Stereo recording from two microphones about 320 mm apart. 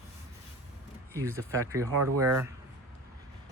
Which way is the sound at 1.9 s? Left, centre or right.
Right.